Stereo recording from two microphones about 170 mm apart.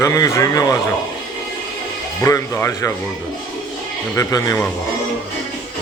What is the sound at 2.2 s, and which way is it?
Speech, 20° left (ahead or behind).